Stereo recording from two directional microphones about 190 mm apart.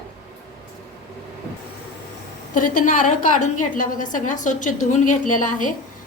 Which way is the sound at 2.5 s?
45° left (ahead or behind).